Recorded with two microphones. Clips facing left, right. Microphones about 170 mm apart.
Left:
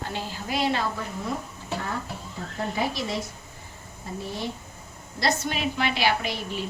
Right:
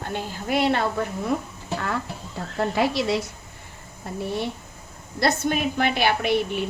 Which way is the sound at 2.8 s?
70° right (ahead or behind).